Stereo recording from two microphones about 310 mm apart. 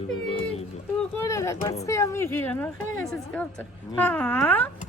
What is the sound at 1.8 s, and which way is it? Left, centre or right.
A woman's voice, centre.